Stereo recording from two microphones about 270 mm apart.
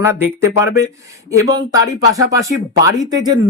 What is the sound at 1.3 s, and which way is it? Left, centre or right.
Speech, centre.